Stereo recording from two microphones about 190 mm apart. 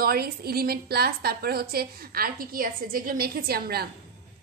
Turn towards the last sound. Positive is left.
turn(degrees=-55)  # may be behind; listen again after turning